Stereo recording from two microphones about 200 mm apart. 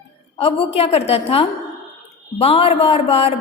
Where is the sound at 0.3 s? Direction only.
30° left (ahead or behind).